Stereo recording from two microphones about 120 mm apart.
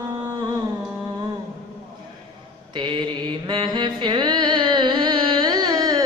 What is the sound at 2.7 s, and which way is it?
Mantra, 40° right (ahead or behind).